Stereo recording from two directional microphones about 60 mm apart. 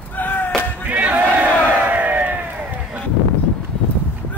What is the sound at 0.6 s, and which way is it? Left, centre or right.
Battle cry, right.